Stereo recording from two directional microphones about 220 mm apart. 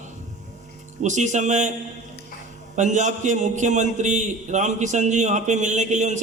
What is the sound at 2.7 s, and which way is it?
A man's voice, 35° right (ahead or behind).